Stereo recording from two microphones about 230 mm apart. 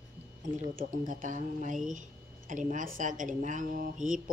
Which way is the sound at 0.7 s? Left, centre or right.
Right.